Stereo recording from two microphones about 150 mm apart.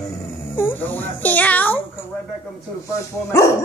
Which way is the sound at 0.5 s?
15° left (ahead or behind).